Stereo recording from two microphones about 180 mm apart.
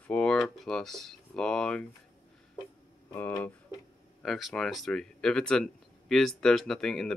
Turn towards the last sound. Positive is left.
turn(degrees=0)  # may be behind; listen again after turning